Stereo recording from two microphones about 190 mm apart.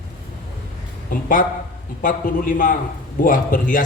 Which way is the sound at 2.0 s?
45° left (ahead or behind).